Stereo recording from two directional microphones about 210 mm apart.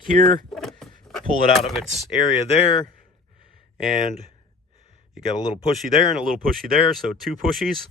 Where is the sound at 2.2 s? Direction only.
20° left (ahead or behind).